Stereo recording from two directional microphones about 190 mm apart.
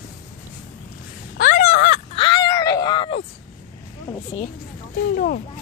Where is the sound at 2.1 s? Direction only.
25° left (ahead or behind).